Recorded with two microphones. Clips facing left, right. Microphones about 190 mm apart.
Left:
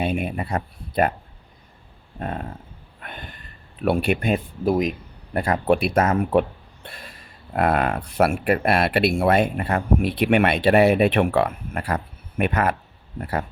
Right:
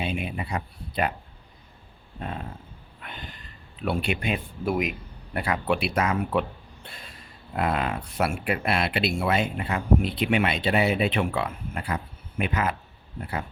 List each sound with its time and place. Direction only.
0.0 s a man's voice: 50° left (ahead or behind)
2.1 s a man's voice: 50° left (ahead or behind)
3.0 s a sound: 50° left (ahead or behind)
3.8 s a man's voice: 55° left (ahead or behind)
7.5 s speech: 55° left (ahead or behind)